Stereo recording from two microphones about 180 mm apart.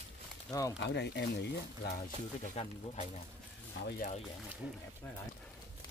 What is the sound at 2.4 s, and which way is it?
Speech, 40° left (ahead or behind).